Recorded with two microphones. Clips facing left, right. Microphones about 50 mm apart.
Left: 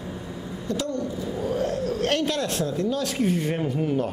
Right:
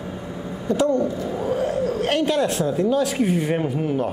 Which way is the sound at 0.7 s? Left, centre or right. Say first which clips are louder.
Right 9 dB; right.